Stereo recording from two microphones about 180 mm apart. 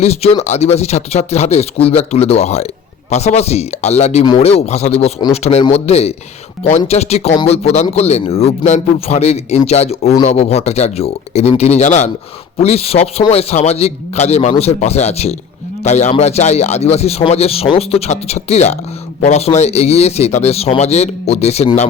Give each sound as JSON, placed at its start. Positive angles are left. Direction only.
{"t": 0.0, "sound": "a man's voice", "side_deg": 35}